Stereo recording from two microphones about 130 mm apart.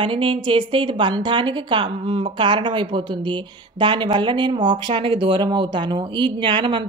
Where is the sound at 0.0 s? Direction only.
40° right (ahead or behind).